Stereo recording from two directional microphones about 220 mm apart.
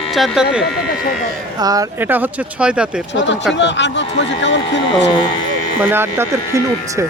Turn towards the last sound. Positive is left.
turn(degrees=-10)  # may be behind; listen again after turning